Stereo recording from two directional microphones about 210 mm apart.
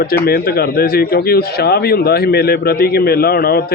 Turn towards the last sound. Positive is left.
turn(degrees=45)  # may be behind; listen again after turning